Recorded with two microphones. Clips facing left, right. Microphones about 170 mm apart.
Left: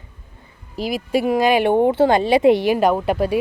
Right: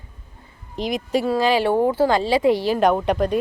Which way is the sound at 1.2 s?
15° left (ahead or behind).